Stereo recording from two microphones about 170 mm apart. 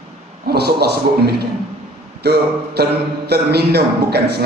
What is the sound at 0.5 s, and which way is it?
A man's voice, 70° right (ahead or behind).